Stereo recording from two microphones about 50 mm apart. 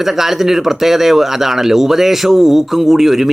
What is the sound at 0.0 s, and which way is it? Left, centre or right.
Speech, centre.